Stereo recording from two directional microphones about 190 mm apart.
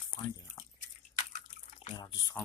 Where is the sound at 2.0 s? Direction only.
20° left (ahead or behind).